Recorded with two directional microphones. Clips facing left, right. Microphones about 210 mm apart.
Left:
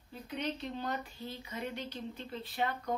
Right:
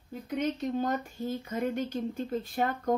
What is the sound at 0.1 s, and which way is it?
Speech, 45° right (ahead or behind).